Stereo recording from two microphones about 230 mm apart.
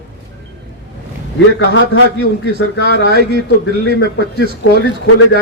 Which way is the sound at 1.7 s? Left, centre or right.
Left.